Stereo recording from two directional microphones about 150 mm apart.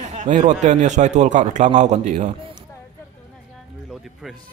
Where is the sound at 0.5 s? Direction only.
50° right (ahead or behind).